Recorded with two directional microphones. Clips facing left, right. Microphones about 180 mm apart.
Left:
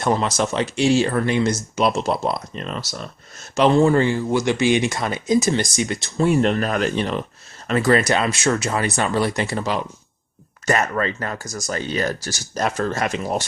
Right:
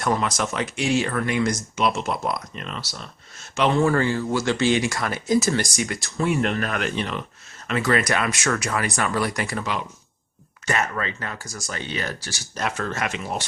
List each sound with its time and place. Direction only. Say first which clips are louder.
0.0 s speech: left 3 dB; 30° left (ahead or behind)
3.8 s speech: left 4 dB; 20° left (ahead or behind)
6.2 s speech: left 5 dB; 35° left (ahead or behind)